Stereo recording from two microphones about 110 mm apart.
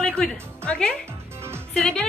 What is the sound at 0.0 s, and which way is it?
A woman's voice, 5° left (ahead or behind).